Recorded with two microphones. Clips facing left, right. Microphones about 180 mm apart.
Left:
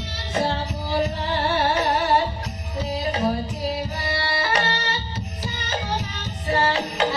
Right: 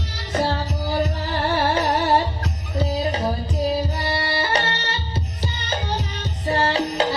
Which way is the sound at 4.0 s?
30° right (ahead or behind).